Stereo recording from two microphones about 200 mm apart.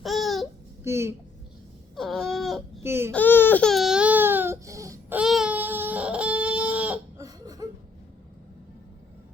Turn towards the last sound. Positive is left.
turn(degrees=-20)  # may be behind; listen again after turning